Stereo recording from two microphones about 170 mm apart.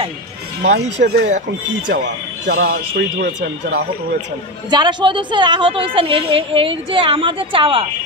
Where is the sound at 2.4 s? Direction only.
60° right (ahead or behind); by 3.8 s 75° right (ahead or behind).